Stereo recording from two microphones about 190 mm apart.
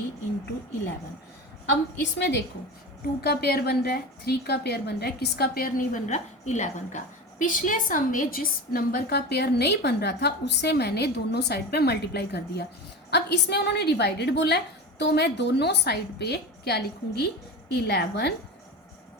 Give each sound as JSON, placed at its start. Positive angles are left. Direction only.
{"t": 2.0, "sound": "a woman's voice", "side_deg": 70}
{"t": 3.2, "sound": "a woman's voice", "side_deg": 55}